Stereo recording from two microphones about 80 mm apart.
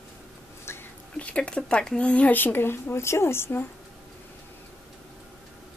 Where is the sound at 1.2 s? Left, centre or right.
Centre.